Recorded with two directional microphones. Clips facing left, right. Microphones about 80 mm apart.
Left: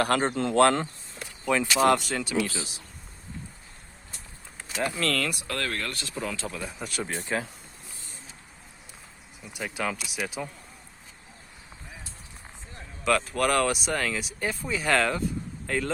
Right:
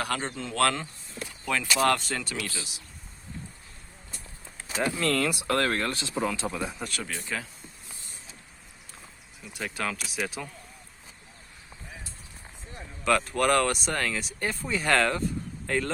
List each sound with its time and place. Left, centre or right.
0.0 s speech: left
0.5 s speech: left
1.5 s speech: centre
4.7 s speech: centre
5.5 s speech: right
6.2 s speech: centre
6.9 s speech: left
7.2 s speech: left
9.5 s speech: centre
12.7 s speech: centre